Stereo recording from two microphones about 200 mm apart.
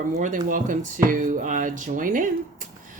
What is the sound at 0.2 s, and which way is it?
Speech, 40° right (ahead or behind).